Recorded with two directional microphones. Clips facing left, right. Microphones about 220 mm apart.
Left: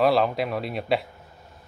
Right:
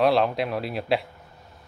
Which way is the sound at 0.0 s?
Centre (ahead or behind).